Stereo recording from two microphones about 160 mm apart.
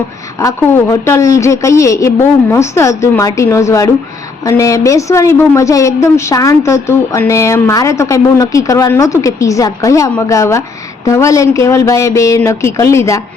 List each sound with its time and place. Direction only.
0.3 s a woman's voice: 20° left (ahead or behind)